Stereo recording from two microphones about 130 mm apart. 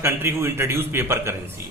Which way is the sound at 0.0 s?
20° right (ahead or behind).